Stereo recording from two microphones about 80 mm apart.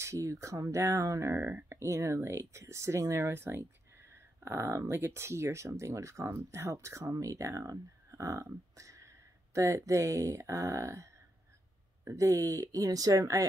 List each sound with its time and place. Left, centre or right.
0.0 s speech: right
1.8 s speech: right